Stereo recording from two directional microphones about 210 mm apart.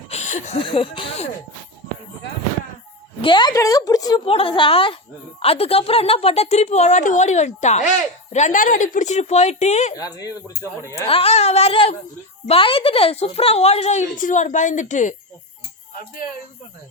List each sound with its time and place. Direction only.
0.1 s speech: 35° left (ahead or behind)
3.2 s a woman's voice: 20° left (ahead or behind)
9.9 s speech: 15° left (ahead or behind)
11.1 s a woman's voice: 30° left (ahead or behind)